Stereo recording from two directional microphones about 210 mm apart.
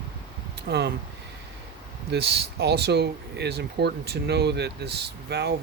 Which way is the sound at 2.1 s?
50° right (ahead or behind).